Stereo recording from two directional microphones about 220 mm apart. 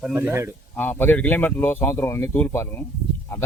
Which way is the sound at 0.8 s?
10° left (ahead or behind).